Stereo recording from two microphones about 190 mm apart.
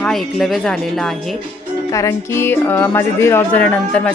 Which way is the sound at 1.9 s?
15° left (ahead or behind).